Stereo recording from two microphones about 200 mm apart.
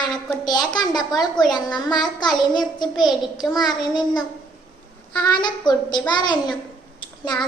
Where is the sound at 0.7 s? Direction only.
20° left (ahead or behind).